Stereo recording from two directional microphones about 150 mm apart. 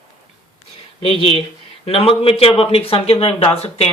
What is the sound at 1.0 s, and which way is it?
Speech, 40° left (ahead or behind).